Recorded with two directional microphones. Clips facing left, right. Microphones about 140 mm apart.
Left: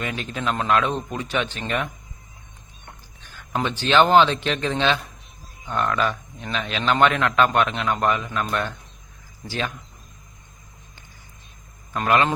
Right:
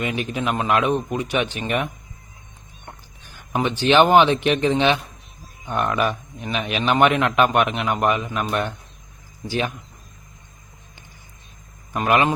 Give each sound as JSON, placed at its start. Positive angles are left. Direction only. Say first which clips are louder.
{"t": 0.0, "sound": "a man's voice", "louder": "right 3 dB", "side_deg": -20}
{"t": 3.5, "sound": "a man's voice", "louder": "right 3 dB", "side_deg": -15}
{"t": 11.9, "sound": "a man's voice", "louder": "right 1 dB", "side_deg": -15}